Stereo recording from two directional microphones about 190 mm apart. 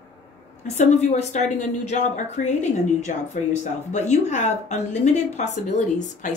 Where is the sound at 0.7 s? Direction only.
35° left (ahead or behind).